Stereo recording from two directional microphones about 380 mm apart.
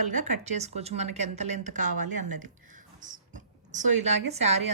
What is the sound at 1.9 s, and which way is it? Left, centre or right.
Speech, right.